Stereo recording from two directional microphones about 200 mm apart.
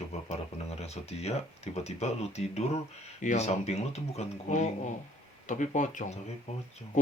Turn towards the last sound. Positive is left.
turn(degrees=35)  # may be behind; listen again after turning